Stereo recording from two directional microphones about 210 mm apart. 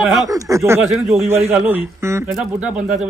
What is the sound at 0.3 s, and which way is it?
Speech, 15° right (ahead or behind).